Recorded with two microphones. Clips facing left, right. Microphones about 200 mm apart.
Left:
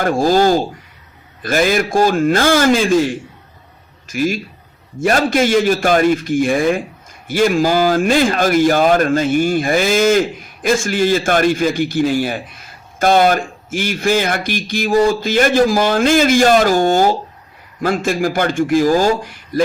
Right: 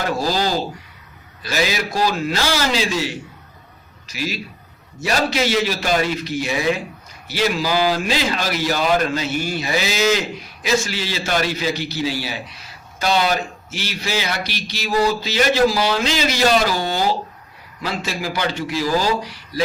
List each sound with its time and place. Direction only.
0.0 s a man's voice: 50° left (ahead or behind)